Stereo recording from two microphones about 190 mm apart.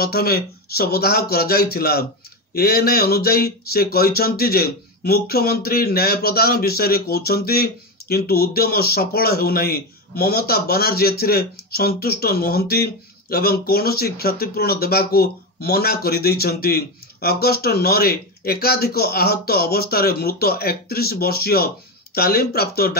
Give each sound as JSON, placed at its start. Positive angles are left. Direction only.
{"t": 0.0, "sound": "speech", "side_deg": 55}